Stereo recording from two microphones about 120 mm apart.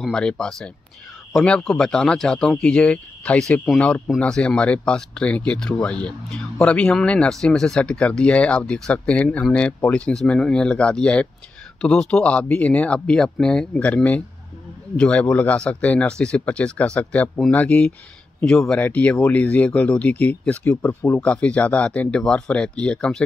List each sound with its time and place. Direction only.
0.0 s speech: 5° left (ahead or behind)